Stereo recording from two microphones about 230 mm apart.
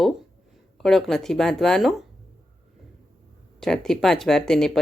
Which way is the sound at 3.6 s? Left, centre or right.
Centre.